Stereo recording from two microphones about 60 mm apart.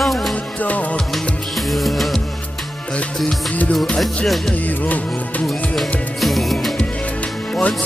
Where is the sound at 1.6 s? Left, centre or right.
Centre.